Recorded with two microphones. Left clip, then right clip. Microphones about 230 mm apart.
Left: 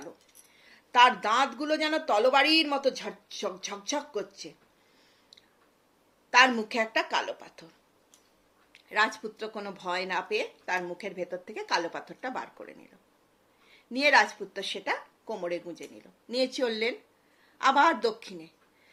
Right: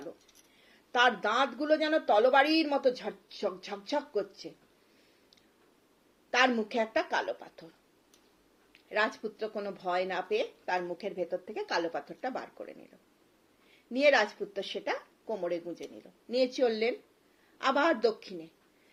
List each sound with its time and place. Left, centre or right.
0.7 s a woman's voice: centre
6.3 s a woman's voice: centre
8.7 s a sound: centre
9.4 s a woman's voice: centre
13.9 s a woman's voice: centre